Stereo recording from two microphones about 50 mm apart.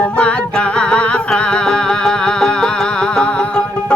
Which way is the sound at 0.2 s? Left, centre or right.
Left.